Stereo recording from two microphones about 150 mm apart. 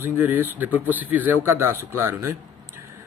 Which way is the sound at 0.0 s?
15° right (ahead or behind).